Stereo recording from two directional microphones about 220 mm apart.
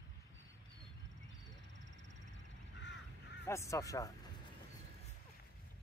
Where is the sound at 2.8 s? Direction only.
55° left (ahead or behind).